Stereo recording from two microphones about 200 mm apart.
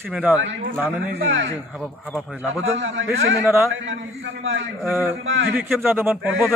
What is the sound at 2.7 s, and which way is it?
Speech, 65° right (ahead or behind).